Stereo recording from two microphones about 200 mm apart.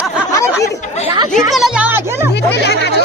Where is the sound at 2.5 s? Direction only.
55° left (ahead or behind).